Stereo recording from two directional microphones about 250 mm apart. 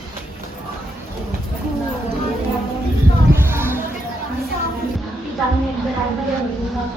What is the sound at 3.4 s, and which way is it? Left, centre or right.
Music, centre.